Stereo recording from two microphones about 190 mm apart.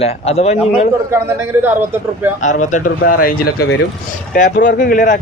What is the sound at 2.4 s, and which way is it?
A man's voice, 40° left (ahead or behind).